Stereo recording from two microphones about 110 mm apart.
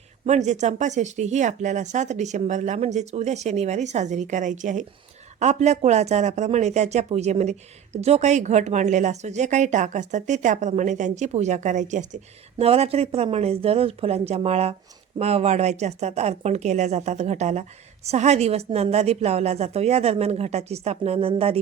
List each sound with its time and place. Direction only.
0.3 s a woman's voice: 90° right; by 21.6 s 60° right (ahead or behind)